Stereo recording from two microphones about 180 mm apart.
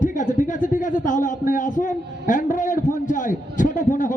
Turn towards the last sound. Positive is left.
turn(degrees=45)  # may be behind; listen again after turning